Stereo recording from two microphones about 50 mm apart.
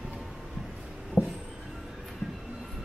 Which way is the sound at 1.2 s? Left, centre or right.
Left.